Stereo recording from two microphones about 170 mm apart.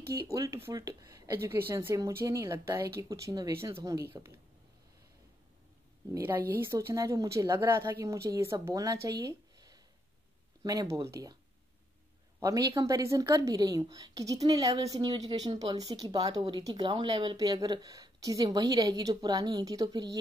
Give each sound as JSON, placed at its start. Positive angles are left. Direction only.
{"t": 0.3, "sound": "speech", "side_deg": -20}
{"t": 6.1, "sound": "a woman's voice", "side_deg": -15}
{"t": 12.4, "sound": "speech", "side_deg": -20}